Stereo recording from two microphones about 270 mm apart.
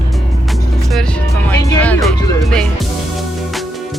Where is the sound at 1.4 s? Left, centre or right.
Centre.